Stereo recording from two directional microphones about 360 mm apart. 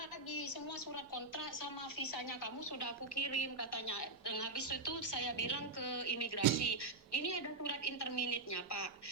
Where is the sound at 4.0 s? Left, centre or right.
Left.